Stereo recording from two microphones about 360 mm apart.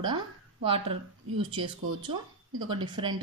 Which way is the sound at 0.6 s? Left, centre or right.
Centre.